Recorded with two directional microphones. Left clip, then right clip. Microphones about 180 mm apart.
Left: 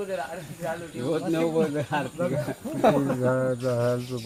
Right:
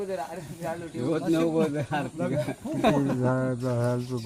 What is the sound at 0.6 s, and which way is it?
Speech, 30° right (ahead or behind).